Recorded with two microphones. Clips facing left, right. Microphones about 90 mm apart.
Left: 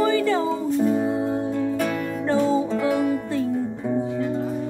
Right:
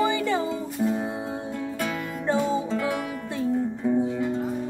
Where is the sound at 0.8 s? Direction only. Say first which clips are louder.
Left 3 dB; 5° right (ahead or behind).